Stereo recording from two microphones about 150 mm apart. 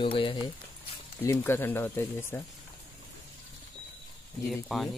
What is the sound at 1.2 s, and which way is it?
Speech, 20° left (ahead or behind).